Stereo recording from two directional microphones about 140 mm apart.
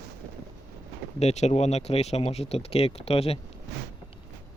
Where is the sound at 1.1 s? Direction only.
50° left (ahead or behind).